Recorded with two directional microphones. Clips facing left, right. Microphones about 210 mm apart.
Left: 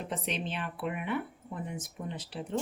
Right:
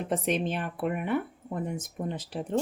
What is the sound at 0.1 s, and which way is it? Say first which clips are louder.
Speech: right 10 dB; 45° right (ahead or behind).